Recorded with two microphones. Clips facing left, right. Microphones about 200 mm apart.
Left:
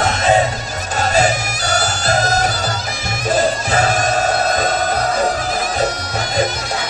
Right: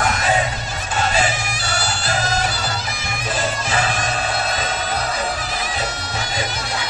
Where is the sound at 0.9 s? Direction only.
40° left (ahead or behind).